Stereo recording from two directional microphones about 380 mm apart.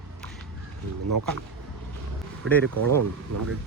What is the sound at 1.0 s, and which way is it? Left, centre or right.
Speech, right.